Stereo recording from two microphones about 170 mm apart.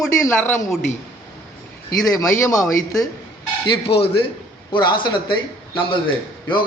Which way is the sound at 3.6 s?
30° left (ahead or behind).